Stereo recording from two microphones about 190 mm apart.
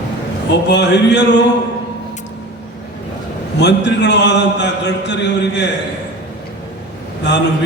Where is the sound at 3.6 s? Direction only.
65° left (ahead or behind).